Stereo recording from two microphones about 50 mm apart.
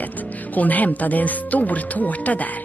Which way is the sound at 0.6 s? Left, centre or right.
Left.